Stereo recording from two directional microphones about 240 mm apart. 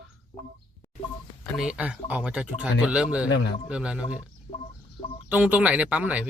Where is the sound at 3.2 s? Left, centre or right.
Left.